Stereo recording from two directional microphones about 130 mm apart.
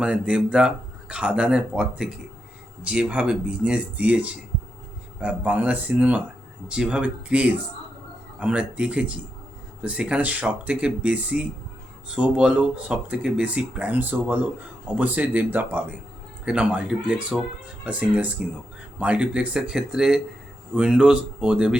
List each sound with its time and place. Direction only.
0.0 s speech: 10° right (ahead or behind)